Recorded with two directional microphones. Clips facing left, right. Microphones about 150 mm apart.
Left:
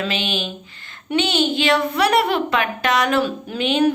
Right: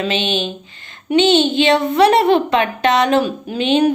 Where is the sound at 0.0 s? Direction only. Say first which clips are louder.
Right 5 dB; 25° right (ahead or behind).